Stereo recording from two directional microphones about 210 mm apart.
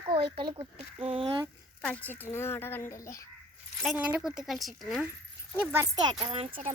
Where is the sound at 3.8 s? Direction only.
5° right (ahead or behind).